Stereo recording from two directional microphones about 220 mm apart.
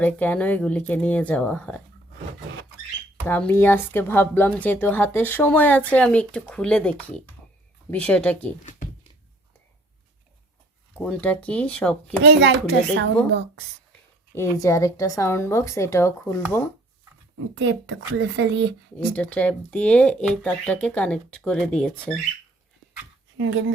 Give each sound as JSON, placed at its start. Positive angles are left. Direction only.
{"t": 0.0, "sound": "speech", "side_deg": 5}
{"t": 3.2, "sound": "speech", "side_deg": 10}
{"t": 10.9, "sound": "speech", "side_deg": 5}
{"t": 12.2, "sound": "a child's voice", "side_deg": -55}
{"t": 14.3, "sound": "speech", "side_deg": 15}
{"t": 17.6, "sound": "speech", "side_deg": -55}
{"t": 18.9, "sound": "speech", "side_deg": 5}
{"t": 23.4, "sound": "speech", "side_deg": -60}